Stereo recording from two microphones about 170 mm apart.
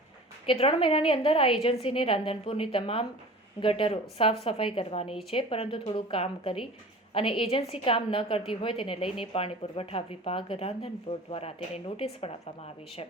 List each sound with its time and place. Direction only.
0.4 s speech: 35° left (ahead or behind)